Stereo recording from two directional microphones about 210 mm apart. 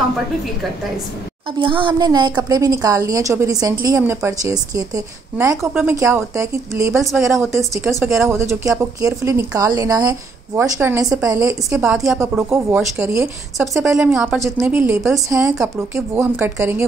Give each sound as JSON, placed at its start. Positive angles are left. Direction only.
{"t": 1.6, "sound": "speech", "side_deg": -25}
{"t": 13.8, "sound": "a woman's voice", "side_deg": -5}
{"t": 15.2, "sound": "speech", "side_deg": -15}